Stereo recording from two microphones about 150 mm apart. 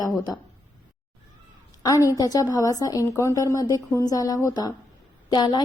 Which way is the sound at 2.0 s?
25° left (ahead or behind).